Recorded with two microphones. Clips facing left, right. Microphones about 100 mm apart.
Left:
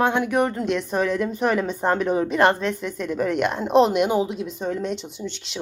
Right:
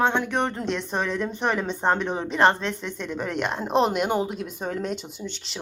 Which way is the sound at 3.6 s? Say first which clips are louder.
Left 5 dB; 35° right (ahead or behind).